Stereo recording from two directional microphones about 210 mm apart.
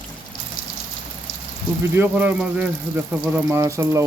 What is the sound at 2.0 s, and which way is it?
Speech, 10° right (ahead or behind).